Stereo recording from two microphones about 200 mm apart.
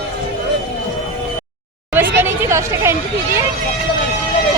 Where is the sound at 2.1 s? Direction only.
10° right (ahead or behind).